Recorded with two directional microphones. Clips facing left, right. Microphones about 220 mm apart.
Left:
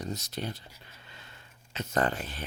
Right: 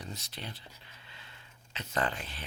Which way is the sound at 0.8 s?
45° left (ahead or behind).